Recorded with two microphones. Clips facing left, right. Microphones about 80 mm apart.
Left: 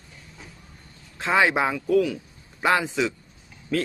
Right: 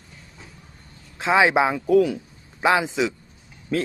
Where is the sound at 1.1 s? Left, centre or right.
Centre.